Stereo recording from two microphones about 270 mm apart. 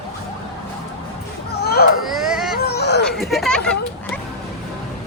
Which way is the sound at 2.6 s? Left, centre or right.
Left.